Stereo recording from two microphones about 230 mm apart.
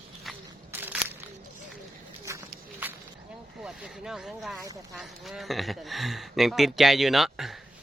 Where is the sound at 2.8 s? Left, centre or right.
Centre.